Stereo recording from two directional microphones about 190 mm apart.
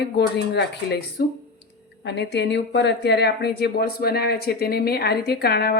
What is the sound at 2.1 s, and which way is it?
Speech, 65° left (ahead or behind).